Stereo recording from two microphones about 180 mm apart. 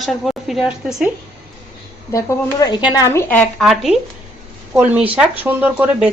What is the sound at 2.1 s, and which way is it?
Speech, 20° left (ahead or behind).